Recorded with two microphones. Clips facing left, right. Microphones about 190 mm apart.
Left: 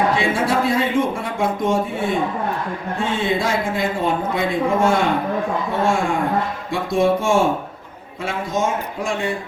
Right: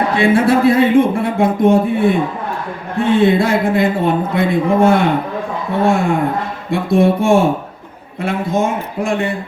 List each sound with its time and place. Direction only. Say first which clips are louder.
0.2 s a man's voice: right 7 dB; 60° right (ahead or behind)